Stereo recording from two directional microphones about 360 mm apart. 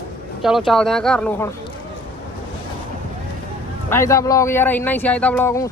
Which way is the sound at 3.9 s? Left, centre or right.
Centre.